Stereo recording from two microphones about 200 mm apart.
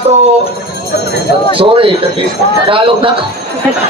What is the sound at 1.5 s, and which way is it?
Speech, 25° right (ahead or behind).